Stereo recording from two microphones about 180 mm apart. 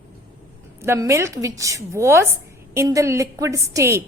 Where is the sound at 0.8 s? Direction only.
15° right (ahead or behind).